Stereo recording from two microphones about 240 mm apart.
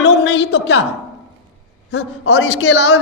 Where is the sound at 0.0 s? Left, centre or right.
Left.